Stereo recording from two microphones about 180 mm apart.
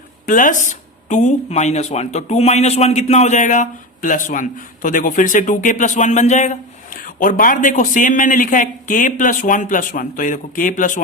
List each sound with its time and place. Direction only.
0.3 s speech: 45° left (ahead or behind)